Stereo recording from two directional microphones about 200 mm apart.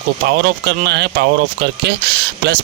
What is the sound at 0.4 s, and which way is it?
Speech, 50° right (ahead or behind).